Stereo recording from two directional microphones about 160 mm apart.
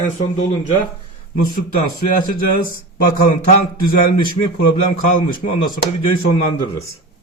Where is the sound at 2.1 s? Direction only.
60° left (ahead or behind).